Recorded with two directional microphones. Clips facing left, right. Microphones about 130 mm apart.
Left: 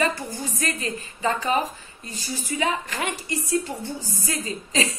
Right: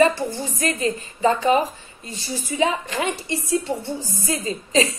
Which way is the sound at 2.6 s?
25° right (ahead or behind).